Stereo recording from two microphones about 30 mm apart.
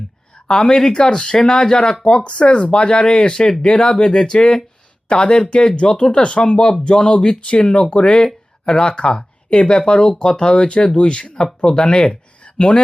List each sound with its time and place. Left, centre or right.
0.5 s speech: left
2.1 s speech: left
7.5 s speech: left
7.8 s speech: left